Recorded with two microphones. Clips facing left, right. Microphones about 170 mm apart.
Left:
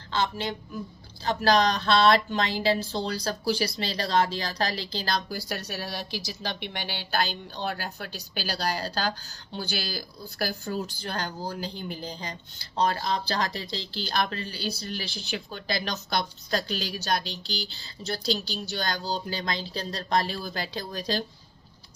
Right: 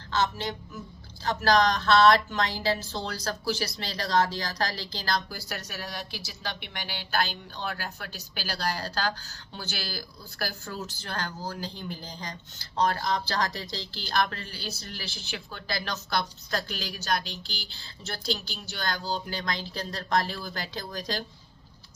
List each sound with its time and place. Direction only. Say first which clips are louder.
1.2 s speech: left 1 dB; 20° left (ahead or behind)